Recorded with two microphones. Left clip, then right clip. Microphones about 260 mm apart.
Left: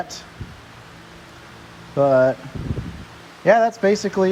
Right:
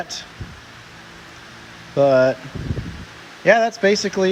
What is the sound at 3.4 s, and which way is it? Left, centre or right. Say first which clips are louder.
Speech: even; centre.